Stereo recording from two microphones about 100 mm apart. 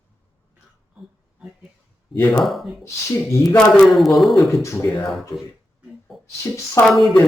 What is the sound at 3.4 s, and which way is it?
A man's voice, 5° left (ahead or behind).